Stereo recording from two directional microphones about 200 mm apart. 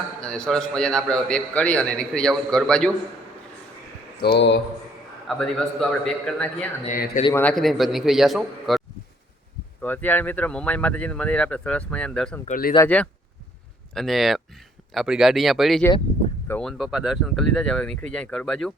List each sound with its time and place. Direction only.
0.2 s a man's voice: 5° left (ahead or behind)
4.2 s speech: 55° left (ahead or behind)
5.3 s a man's voice: centre (ahead or behind)
6.8 s a man's voice: 40° left (ahead or behind)
7.3 s a man's voice: 5° left (ahead or behind)
9.8 s speech: 10° left (ahead or behind)
12.5 s a man's voice: 45° left (ahead or behind)
12.7 s a man's voice: 10° left (ahead or behind)